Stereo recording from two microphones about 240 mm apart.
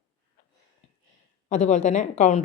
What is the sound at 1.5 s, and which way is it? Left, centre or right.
Speech, left.